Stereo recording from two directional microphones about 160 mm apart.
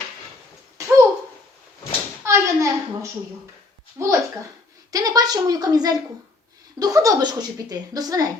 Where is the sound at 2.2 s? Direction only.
15° right (ahead or behind).